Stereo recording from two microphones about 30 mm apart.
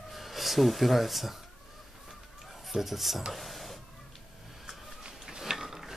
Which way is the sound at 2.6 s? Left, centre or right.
Centre.